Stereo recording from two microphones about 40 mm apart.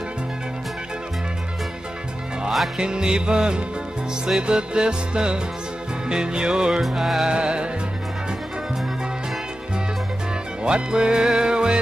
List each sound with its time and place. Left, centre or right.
2.8 s music: centre
6.9 s music: centre
7.2 s music: right
10.6 s music: right